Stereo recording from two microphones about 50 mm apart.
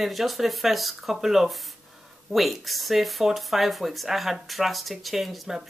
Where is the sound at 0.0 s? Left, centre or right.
Centre.